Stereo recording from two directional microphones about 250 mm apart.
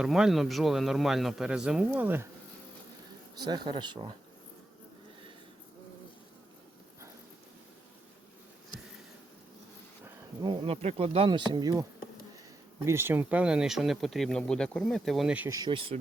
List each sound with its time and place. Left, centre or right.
0.0 s speech: centre
3.3 s speech: centre
10.4 s bee: centre
12.8 s speech: centre